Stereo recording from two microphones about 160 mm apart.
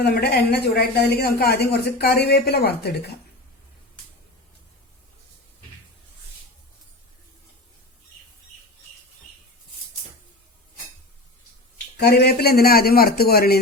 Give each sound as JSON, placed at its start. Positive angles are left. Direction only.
{"t": 0.0, "sound": "speech", "side_deg": 90}
{"t": 11.9, "sound": "speech", "side_deg": 90}